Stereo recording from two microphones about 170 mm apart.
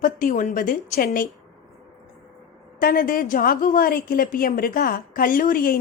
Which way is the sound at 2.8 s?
60° left (ahead or behind).